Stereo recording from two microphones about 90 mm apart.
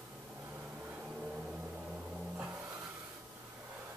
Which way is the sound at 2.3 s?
20° right (ahead or behind).